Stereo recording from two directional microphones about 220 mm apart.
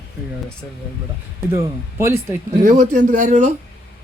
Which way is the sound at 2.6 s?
35° right (ahead or behind).